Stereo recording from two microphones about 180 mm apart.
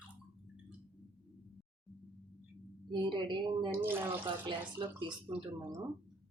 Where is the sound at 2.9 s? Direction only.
25° right (ahead or behind).